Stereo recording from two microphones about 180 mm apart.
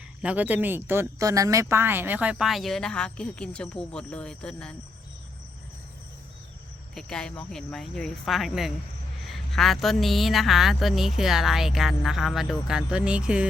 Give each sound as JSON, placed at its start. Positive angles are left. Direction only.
{"t": 0.2, "sound": "speech", "side_deg": -5}
{"t": 6.9, "sound": "speech", "side_deg": 5}